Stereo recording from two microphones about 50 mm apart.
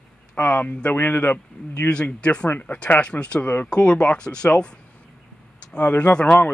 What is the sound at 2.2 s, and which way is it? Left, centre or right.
Speech, left.